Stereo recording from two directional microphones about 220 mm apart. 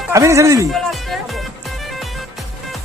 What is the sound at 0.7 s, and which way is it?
Music, centre (ahead or behind).